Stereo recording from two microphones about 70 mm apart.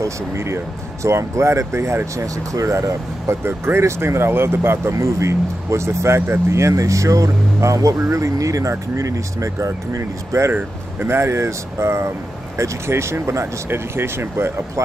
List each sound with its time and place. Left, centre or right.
0.0 s speech: right
4.9 s speech: right
10.5 s speech: right